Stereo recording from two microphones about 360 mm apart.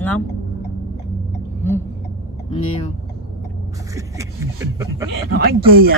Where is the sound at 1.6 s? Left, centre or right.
Centre.